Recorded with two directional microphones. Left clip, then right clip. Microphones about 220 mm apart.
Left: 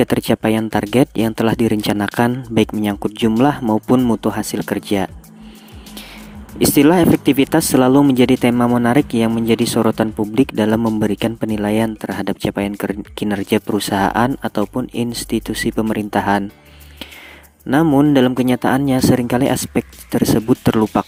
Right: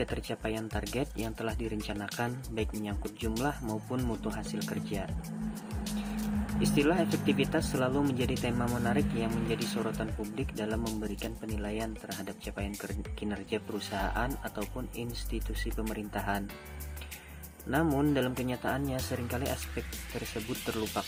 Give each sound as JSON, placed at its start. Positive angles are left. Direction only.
{"t": 0.0, "sound": "speech", "side_deg": 50}
{"t": 6.6, "sound": "speech", "side_deg": 50}
{"t": 17.7, "sound": "speech", "side_deg": 50}